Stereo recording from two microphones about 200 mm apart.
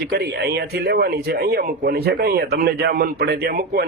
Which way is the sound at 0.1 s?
55° right (ahead or behind).